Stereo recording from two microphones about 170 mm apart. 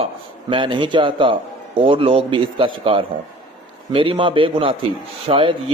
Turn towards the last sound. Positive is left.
turn(degrees=-30)  # may be behind; listen again after turning